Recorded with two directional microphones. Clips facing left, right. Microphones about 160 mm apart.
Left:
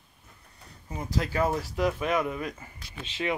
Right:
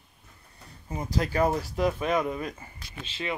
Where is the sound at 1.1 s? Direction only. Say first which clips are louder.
Right 2 dB; 40° right (ahead or behind).